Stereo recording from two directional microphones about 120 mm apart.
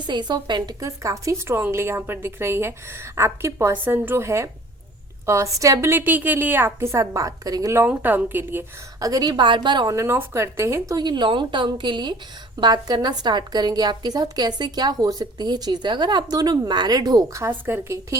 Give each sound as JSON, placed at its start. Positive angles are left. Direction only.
{"t": 0.0, "sound": "a woman's voice", "side_deg": -40}
{"t": 7.9, "sound": "a woman's voice", "side_deg": -15}
{"t": 9.0, "sound": "a woman's voice", "side_deg": -30}
{"t": 9.3, "sound": "a woman's voice", "side_deg": -40}
{"t": 9.9, "sound": "a woman's voice", "side_deg": -25}